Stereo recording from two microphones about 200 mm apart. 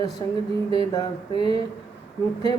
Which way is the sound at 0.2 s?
20° left (ahead or behind).